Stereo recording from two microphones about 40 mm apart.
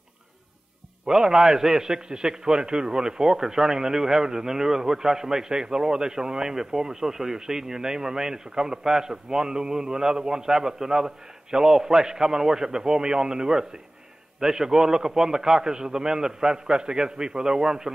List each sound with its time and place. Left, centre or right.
1.0 s a man's voice: centre